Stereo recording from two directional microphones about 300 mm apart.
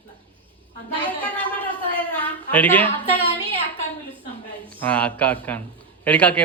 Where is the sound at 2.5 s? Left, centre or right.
Centre.